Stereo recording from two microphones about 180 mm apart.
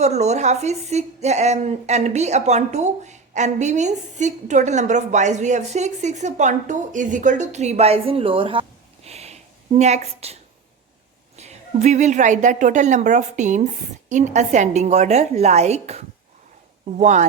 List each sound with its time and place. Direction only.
0.0 s a woman's voice: 40° right (ahead or behind)
9.0 s a sound: 35° right (ahead or behind)
11.3 s a woman's voice: 40° right (ahead or behind)